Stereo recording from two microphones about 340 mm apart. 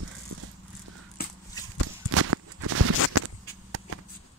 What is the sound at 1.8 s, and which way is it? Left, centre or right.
Walk, right.